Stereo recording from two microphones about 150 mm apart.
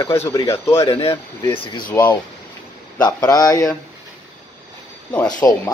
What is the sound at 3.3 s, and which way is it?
Speech, 25° left (ahead or behind).